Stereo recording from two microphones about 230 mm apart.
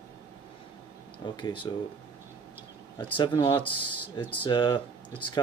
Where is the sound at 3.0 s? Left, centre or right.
Centre.